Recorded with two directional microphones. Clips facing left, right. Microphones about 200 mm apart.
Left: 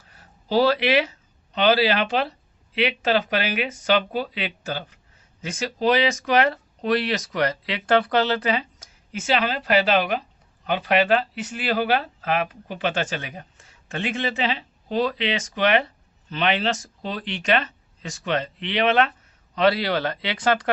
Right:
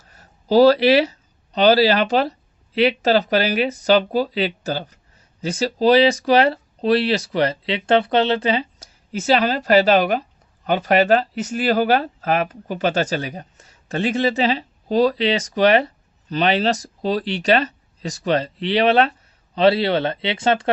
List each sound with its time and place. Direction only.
0.2 s speech: 40° right (ahead or behind); by 20.7 s 25° right (ahead or behind)